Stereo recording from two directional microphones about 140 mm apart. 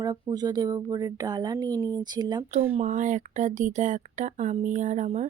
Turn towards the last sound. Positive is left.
turn(degrees=-60)  # may be behind; listen again after turning